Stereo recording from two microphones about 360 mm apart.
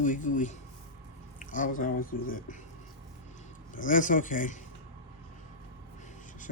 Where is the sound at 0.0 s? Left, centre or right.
Left.